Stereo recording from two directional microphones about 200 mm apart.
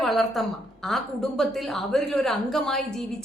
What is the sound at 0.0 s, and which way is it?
A woman's voice, centre (ahead or behind).